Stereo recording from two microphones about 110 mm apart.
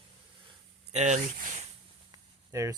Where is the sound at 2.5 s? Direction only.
25° right (ahead or behind).